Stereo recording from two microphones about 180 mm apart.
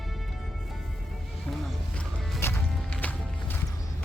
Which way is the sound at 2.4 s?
10° left (ahead or behind).